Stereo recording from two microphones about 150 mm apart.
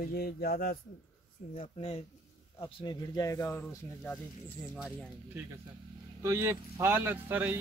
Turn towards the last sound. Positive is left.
turn(degrees=-15)  # may be behind; listen again after turning